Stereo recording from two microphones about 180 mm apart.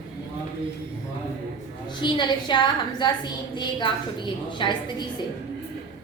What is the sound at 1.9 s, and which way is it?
A woman's voice, 25° left (ahead or behind).